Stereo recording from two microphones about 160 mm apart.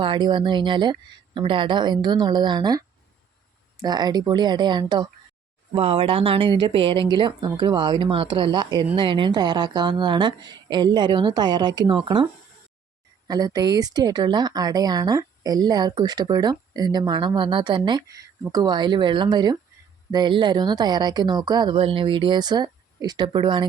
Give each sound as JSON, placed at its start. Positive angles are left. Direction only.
{"t": 0.0, "sound": "speech", "side_deg": -30}
{"t": 13.2, "sound": "speech", "side_deg": -25}